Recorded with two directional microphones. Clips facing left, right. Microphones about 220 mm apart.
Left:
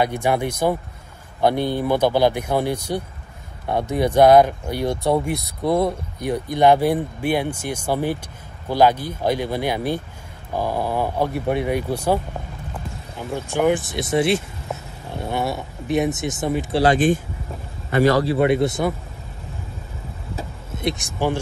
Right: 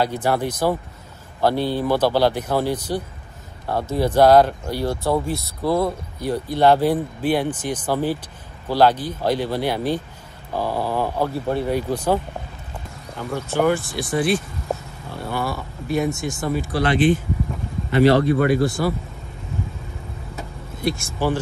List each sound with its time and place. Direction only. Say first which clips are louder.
0.0 s speech: left 1 dB; 15° left (ahead or behind)
13.2 s speech: even; 15° left (ahead or behind)
16.8 s speech: left 1 dB; 45° left (ahead or behind)
18.2 s speech: even; 25° left (ahead or behind)
20.3 s vehicle: left 3 dB; 20° left (ahead or behind)